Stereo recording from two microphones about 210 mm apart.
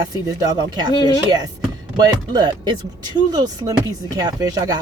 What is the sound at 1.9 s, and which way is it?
Speech, 20° right (ahead or behind).